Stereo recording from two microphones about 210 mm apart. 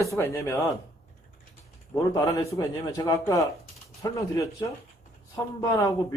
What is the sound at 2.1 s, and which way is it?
Speech, 15° left (ahead or behind).